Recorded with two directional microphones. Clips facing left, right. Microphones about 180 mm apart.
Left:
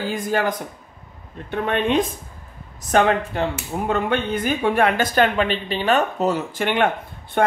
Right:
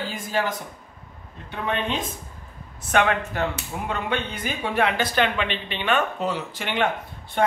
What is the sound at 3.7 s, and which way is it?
Speech, 45° left (ahead or behind).